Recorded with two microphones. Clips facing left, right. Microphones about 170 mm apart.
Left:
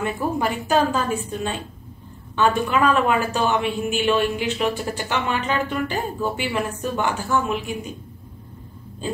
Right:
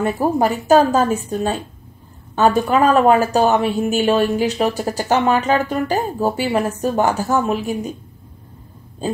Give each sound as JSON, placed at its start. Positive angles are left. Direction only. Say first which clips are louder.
{"t": 0.0, "sound": "speech", "louder": "right 6 dB", "side_deg": -40}